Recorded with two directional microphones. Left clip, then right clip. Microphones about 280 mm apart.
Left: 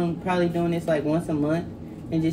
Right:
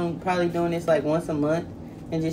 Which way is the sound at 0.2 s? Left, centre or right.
Centre.